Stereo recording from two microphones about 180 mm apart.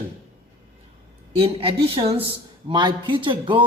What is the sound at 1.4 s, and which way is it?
A man's voice, 30° right (ahead or behind).